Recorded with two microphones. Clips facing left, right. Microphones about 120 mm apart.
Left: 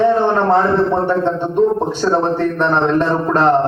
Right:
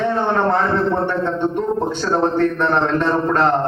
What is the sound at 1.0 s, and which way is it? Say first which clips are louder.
A man's voice: left 3 dB; 20° left (ahead or behind).